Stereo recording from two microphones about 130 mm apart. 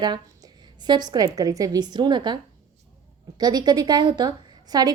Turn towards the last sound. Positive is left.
turn(degrees=-30)  # may be behind; listen again after turning